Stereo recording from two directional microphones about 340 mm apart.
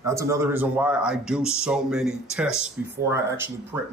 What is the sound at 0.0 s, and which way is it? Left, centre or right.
Speech, centre.